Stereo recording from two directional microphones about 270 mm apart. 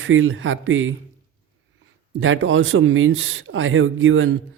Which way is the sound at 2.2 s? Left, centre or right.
Right.